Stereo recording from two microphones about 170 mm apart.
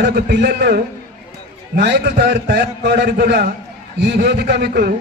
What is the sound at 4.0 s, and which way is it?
Speech, 85° right.